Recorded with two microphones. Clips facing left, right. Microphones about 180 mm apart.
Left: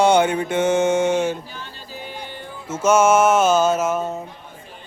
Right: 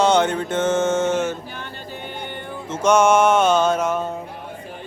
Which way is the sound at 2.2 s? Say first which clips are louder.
Right 3 dB; 60° right (ahead or behind).